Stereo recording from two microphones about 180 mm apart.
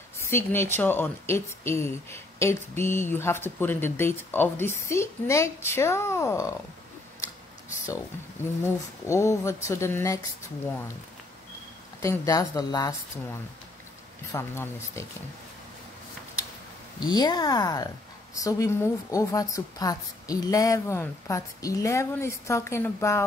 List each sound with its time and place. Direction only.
0.2 s speech: 15° left (ahead or behind)
7.7 s a sound: 15° left (ahead or behind)
8.6 s speech: 15° left (ahead or behind)
12.0 s speech: 20° left (ahead or behind)
14.3 s speech: 15° left (ahead or behind)
17.0 s speech: 20° left (ahead or behind)